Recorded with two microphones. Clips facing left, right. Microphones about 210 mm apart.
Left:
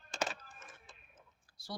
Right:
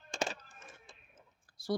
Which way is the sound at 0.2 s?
25° right (ahead or behind).